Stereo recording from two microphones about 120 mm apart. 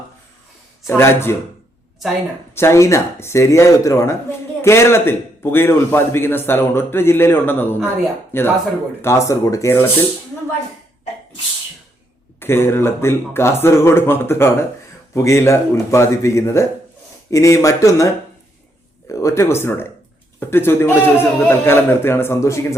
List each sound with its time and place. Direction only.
0.9 s speech: 20° left (ahead or behind)
2.6 s speech: 25° left (ahead or behind)
12.4 s speech: 20° left (ahead or behind)